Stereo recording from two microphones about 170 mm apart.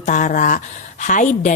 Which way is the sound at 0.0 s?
45° left (ahead or behind).